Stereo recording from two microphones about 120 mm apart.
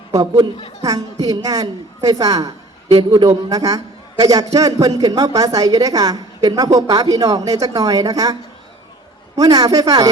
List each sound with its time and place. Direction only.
0.1 s a woman's voice: 30° right (ahead or behind)